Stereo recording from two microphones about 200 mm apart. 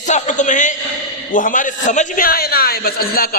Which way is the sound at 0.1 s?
35° left (ahead or behind).